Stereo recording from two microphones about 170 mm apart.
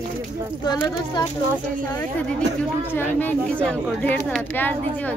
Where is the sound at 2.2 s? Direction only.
5° left (ahead or behind).